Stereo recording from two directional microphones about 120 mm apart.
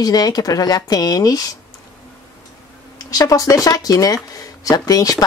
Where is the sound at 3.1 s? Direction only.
30° left (ahead or behind).